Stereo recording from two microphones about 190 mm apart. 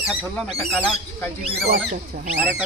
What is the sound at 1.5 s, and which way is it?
Speech, 55° right (ahead or behind).